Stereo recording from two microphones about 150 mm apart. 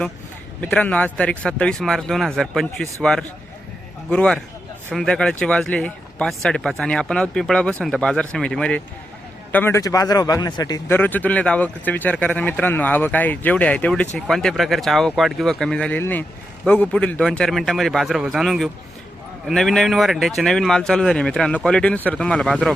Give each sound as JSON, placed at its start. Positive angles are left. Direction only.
{"t": 0.6, "sound": "a man's voice", "side_deg": 10}
{"t": 10.8, "sound": "speech", "side_deg": 10}